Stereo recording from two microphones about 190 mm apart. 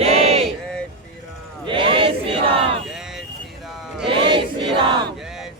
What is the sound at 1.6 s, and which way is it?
Sheep, 25° right (ahead or behind).